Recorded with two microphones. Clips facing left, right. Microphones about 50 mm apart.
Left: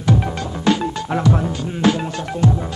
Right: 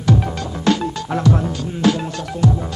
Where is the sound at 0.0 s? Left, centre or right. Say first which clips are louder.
Even; centre.